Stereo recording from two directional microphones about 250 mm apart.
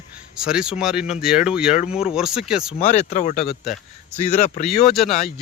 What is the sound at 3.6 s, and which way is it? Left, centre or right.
A man's voice, centre.